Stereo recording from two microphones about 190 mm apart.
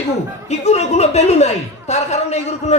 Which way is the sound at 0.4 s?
35° left (ahead or behind).